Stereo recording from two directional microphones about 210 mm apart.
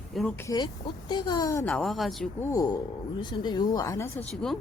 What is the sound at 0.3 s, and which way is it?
Speech, 15° left (ahead or behind).